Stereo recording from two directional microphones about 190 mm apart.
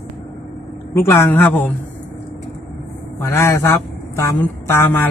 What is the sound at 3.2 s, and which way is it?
A man's voice, 15° left (ahead or behind).